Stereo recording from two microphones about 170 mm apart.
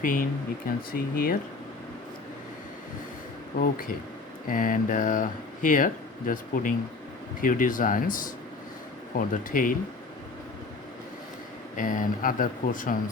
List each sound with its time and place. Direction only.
0.0 s speech: 55° left (ahead or behind)
4.4 s speech: 55° left (ahead or behind)
11.8 s speech: 50° left (ahead or behind)